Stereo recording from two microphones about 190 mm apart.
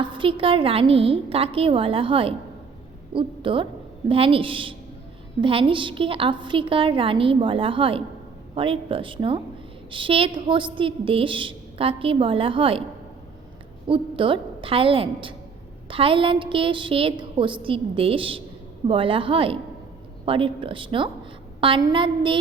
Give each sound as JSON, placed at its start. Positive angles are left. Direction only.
{"t": 0.0, "sound": "a woman's voice", "side_deg": -25}
{"t": 13.8, "sound": "a woman's voice", "side_deg": -25}